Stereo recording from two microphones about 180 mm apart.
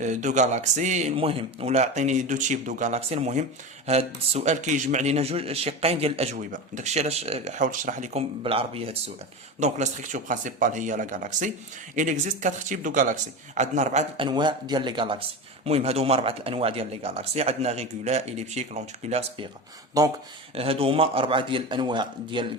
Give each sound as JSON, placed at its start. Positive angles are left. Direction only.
{"t": 0.0, "sound": "a man's voice", "side_deg": -40}
{"t": 1.1, "sound": "a man's voice", "side_deg": -30}
{"t": 14.2, "sound": "a man's voice", "side_deg": -25}
{"t": 20.0, "sound": "a man's voice", "side_deg": -20}
{"t": 20.6, "sound": "a man's voice", "side_deg": -30}